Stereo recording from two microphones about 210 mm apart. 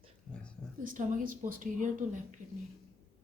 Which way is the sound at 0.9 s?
40° right (ahead or behind).